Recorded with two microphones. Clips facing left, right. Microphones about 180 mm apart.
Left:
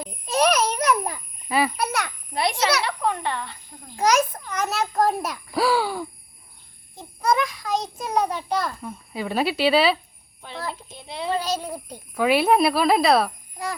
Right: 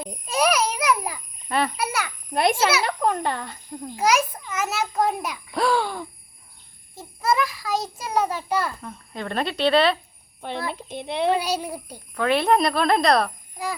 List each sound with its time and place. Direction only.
0.3 s a sound: 10° right (ahead or behind)
1.5 s a child's voice: 5° left (ahead or behind)
1.8 s a sound: 5° right (ahead or behind)
2.3 s a child's voice: 50° right (ahead or behind)
2.8 s speech: 40° right (ahead or behind)
3.9 s a child's voice: 5° right (ahead or behind)
8.8 s a child's voice: 5° left (ahead or behind)
10.8 s speech: 65° right (ahead or behind)
11.3 s speech: 10° right (ahead or behind)
12.1 s a child's voice: 10° left (ahead or behind)